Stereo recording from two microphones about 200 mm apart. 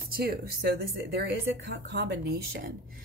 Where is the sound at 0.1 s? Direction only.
50° right (ahead or behind).